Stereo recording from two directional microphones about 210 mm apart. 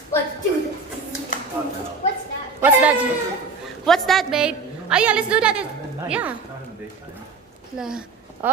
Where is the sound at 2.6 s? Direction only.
5° right (ahead or behind).